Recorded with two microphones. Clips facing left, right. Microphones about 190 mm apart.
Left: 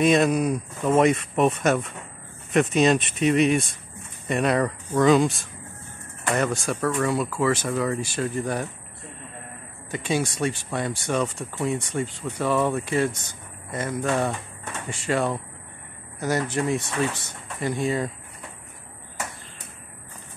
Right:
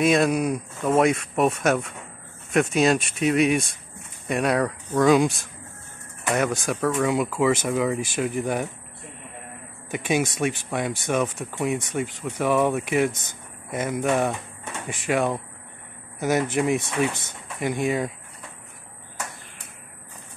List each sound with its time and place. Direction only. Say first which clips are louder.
0.0 s speech: left 1 dB; 5° right (ahead or behind)
9.8 s speech: right 2 dB; 15° right (ahead or behind)